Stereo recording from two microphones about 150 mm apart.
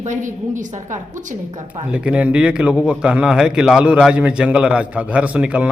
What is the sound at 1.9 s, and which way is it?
A man's voice, 10° right (ahead or behind).